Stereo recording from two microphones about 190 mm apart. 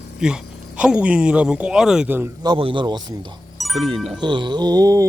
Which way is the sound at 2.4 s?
25° right (ahead or behind).